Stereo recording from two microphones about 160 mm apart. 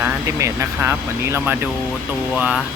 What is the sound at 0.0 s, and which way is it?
Speech, 15° right (ahead or behind).